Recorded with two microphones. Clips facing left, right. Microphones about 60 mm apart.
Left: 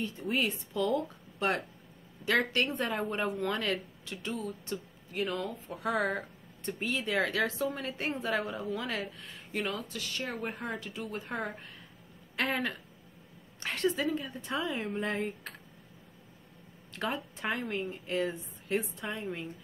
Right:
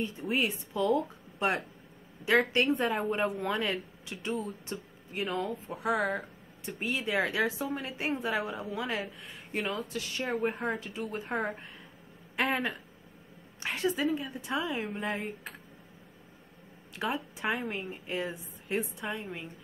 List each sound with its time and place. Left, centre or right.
0.3 s a woman's voice: right
2.8 s a woman's voice: centre
4.2 s speech: right
5.2 s speech: centre
6.8 s a woman's voice: centre
13.6 s a woman's voice: centre
16.9 s a woman's voice: centre